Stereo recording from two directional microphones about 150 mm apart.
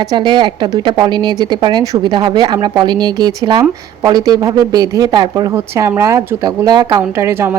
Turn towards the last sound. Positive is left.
turn(degrees=-15)  # may be behind; listen again after turning